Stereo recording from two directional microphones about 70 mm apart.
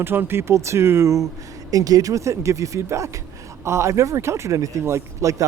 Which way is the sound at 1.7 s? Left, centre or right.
Right.